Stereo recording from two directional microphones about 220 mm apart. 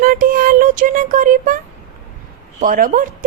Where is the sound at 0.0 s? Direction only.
40° right (ahead or behind).